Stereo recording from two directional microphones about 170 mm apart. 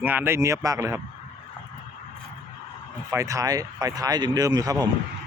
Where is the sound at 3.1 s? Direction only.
20° right (ahead or behind).